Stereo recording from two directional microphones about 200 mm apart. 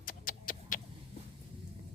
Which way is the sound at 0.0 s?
45° left (ahead or behind).